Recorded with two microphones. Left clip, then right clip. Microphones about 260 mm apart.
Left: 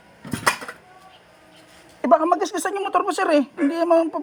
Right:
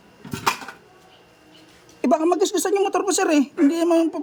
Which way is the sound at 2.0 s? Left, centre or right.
Centre.